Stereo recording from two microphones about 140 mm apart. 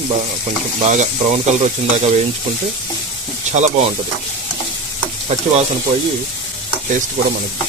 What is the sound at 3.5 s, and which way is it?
Speech, 60° right (ahead or behind).